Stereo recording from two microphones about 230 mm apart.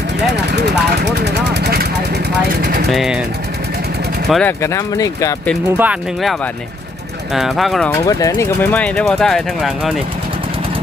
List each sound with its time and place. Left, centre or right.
0.3 s vehicle: right
2.9 s speech: centre
4.3 s speech: centre
5.6 s speech: centre
7.3 s speech: centre
8.0 s speech: centre